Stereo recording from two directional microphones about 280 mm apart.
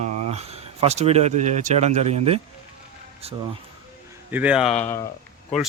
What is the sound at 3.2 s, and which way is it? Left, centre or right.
Speech, right.